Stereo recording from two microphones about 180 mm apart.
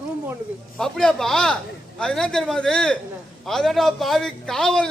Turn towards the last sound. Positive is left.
turn(degrees=5)  # may be behind; listen again after turning